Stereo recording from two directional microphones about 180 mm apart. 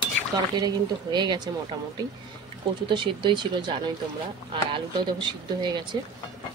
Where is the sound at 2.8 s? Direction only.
25° right (ahead or behind).